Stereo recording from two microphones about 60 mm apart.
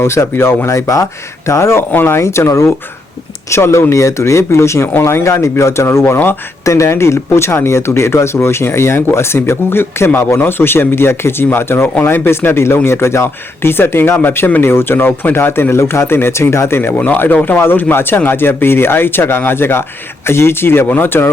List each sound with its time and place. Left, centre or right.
0.0 s speech: left
1.9 s speech: left
17.3 s speech: left